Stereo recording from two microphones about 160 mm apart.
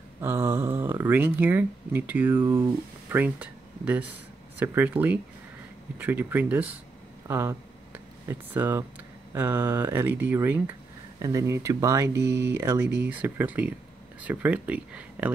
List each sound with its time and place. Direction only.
0.2 s speech: 15° right (ahead or behind)
7.2 s a sound: 15° right (ahead or behind)
9.3 s speech: 15° right (ahead or behind)
12.8 s speech: 90° right
13.1 s speech: 10° right (ahead or behind)